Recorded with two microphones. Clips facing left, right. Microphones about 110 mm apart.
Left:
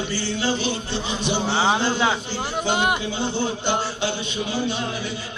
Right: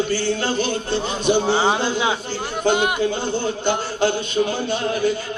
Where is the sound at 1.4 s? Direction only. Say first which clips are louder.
Right 2 dB; 15° right (ahead or behind).